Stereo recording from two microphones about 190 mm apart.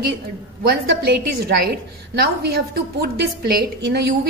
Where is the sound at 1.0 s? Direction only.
60° right (ahead or behind).